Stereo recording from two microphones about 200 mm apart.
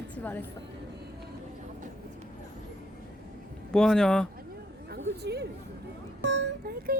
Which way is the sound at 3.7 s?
5° left (ahead or behind).